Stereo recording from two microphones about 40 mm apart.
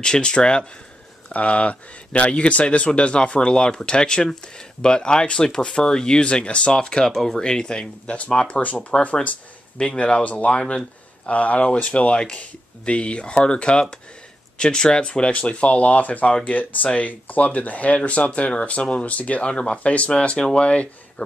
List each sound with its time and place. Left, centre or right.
0.0 s speech: centre
1.3 s speech: left
8.5 s speech: left
10.2 s speech: left
10.5 s speech: centre
11.2 s speech: left
11.7 s speech: left